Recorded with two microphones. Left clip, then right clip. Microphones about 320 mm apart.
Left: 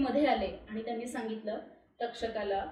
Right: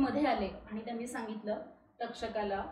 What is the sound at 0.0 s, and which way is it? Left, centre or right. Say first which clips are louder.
A woman's voice: left 3 dB; centre.